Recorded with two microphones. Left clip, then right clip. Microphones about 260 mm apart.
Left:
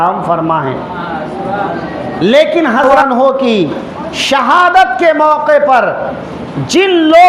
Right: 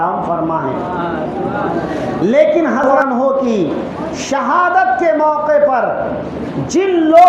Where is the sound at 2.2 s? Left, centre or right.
Left.